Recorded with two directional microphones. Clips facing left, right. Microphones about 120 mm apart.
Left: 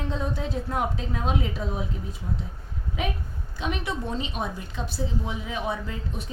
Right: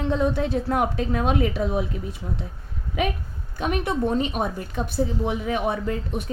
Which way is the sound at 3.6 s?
50° right (ahead or behind).